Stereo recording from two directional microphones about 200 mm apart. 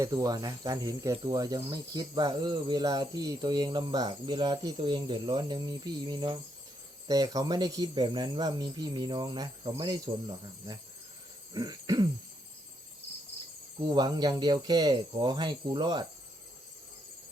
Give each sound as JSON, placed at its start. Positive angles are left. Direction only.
{"t": 0.0, "sound": "speech", "side_deg": -15}
{"t": 13.7, "sound": "speech", "side_deg": -20}